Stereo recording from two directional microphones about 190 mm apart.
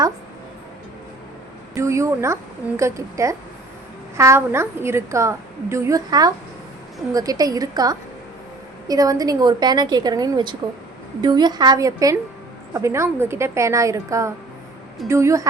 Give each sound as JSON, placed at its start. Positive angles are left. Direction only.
{"t": 1.7, "sound": "a woman's voice", "side_deg": -15}